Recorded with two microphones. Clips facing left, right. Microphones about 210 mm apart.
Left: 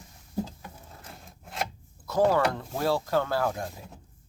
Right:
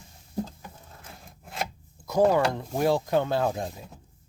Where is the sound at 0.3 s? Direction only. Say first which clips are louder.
Even; centre (ahead or behind).